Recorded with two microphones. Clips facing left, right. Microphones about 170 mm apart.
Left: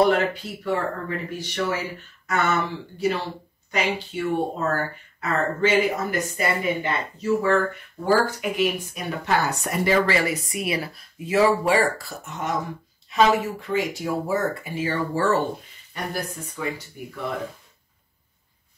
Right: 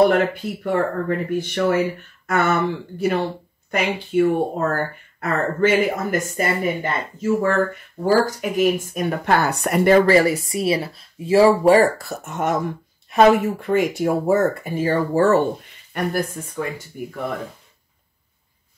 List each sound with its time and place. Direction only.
0.1 s speech: 55° right (ahead or behind)
9.9 s speech: 40° right (ahead or behind)
11.7 s speech: 45° right (ahead or behind)
15.9 s speech: 55° right (ahead or behind)